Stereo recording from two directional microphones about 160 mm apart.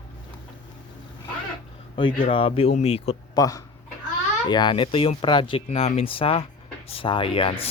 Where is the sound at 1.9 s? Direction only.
30° left (ahead or behind).